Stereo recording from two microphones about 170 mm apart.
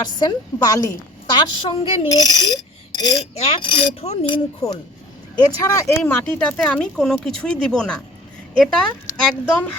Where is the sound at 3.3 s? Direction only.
35° left (ahead or behind).